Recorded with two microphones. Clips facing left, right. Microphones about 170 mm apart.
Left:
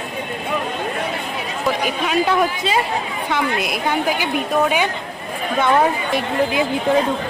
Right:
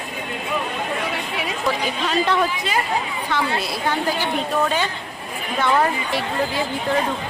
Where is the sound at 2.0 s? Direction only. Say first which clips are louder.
Left 2 dB; 10° left (ahead or behind).